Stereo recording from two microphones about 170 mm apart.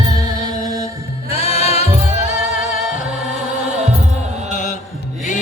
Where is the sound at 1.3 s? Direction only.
35° left (ahead or behind).